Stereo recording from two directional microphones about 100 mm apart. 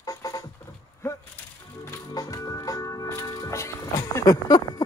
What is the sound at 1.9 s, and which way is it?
Music, 35° left (ahead or behind).